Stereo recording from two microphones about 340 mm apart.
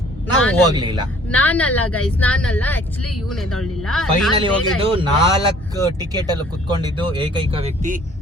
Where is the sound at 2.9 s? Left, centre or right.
Left.